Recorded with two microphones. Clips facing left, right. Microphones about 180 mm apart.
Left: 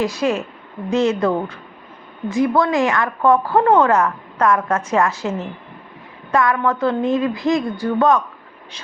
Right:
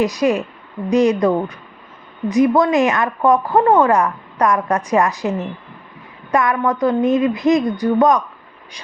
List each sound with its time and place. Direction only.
0.0 s speech: 15° right (ahead or behind)